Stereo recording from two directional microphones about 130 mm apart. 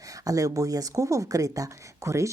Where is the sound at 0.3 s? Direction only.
25° right (ahead or behind).